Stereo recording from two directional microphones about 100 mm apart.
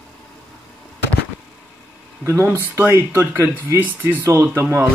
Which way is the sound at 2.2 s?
25° right (ahead or behind).